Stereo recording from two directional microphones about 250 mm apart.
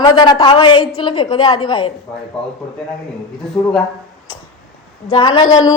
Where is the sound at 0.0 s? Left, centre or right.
Centre.